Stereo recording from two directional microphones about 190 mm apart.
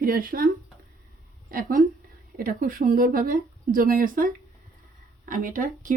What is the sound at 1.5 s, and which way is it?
Speech, 45° right (ahead or behind).